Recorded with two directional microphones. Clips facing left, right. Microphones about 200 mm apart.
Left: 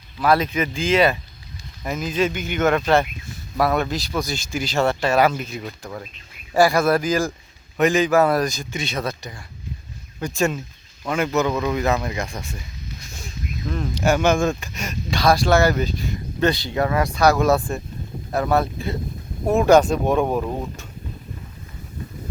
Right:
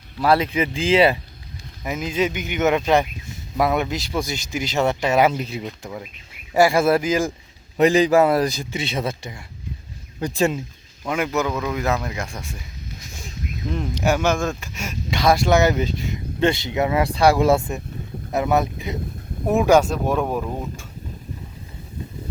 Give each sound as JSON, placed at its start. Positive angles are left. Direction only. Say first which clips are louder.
{"t": 0.2, "sound": "speech", "louder": "right 1 dB", "side_deg": -30}
{"t": 2.0, "sound": "speech", "louder": "even", "side_deg": -20}
{"t": 7.8, "sound": "speech", "louder": "right 2 dB", "side_deg": -35}
{"t": 11.1, "sound": "speech", "louder": "left 2 dB", "side_deg": -10}
{"t": 13.7, "sound": "speech", "louder": "left 1 dB", "side_deg": -15}
{"t": 14.2, "sound": "speech", "louder": "left 3 dB", "side_deg": 0}
{"t": 15.1, "sound": "speech", "louder": "even", "side_deg": -20}
{"t": 19.5, "sound": "speech", "louder": "left 1 dB", "side_deg": -5}